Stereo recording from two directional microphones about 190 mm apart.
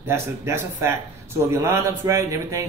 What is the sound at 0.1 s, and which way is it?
A man's voice, 15° right (ahead or behind).